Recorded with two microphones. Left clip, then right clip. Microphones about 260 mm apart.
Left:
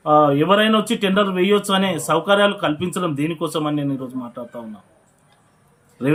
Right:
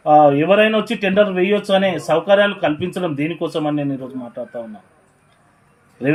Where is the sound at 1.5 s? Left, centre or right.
Left.